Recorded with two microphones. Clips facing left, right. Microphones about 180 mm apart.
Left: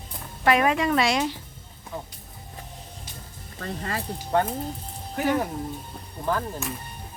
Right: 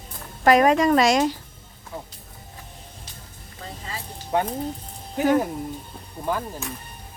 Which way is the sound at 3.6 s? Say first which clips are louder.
Left 5 dB; 60° left (ahead or behind).